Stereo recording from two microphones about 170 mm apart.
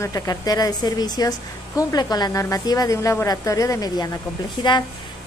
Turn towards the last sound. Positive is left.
turn(degrees=25)  # may be behind; listen again after turning